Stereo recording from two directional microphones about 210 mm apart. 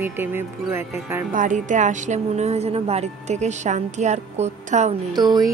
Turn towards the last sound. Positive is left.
turn(degrees=-20)  # may be behind; listen again after turning